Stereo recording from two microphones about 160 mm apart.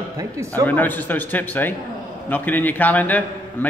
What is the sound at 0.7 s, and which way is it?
A man's voice, 10° left (ahead or behind).